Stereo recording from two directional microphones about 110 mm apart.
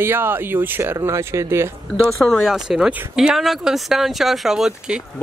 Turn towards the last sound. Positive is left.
turn(degrees=-5)  # may be behind; listen again after turning